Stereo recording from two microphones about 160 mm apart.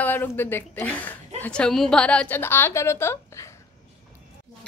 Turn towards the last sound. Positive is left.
turn(degrees=15)  # may be behind; listen again after turning